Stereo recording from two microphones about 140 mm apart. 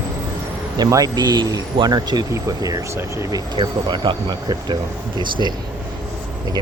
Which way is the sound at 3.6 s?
35° right (ahead or behind).